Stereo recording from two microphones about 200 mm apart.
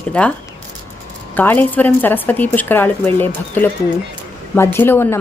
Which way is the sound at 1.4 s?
10° left (ahead or behind).